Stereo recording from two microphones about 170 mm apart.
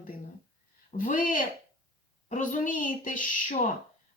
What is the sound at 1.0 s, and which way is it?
A woman's voice, 55° left (ahead or behind).